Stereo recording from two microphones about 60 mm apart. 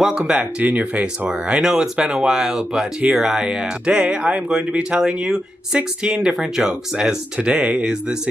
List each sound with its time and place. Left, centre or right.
0.3 s speech: centre
0.7 s speech: right
1.6 s speech: centre